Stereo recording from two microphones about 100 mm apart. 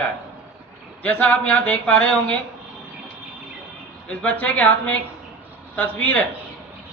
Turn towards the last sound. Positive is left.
turn(degrees=15)  # may be behind; listen again after turning